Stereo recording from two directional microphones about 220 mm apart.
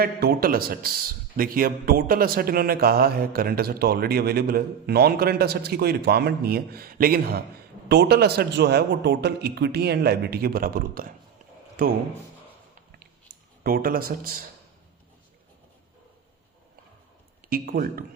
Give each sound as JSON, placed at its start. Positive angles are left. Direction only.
{"t": 0.0, "sound": "a man's voice", "side_deg": -45}
{"t": 13.7, "sound": "speech", "side_deg": -40}
{"t": 17.5, "sound": "speech", "side_deg": -40}